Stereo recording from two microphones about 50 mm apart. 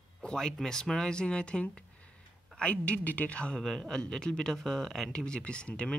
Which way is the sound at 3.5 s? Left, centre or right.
Centre.